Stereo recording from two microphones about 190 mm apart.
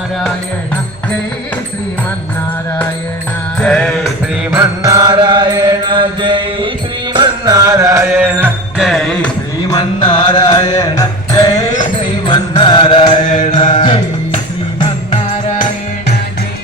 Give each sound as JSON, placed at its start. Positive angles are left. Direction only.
{"t": 3.6, "sound": "music", "side_deg": 5}
{"t": 4.5, "sound": "mantra", "side_deg": -15}
{"t": 7.1, "sound": "music", "side_deg": -20}
{"t": 8.9, "sound": "music", "side_deg": 5}
{"t": 9.6, "sound": "music", "side_deg": 25}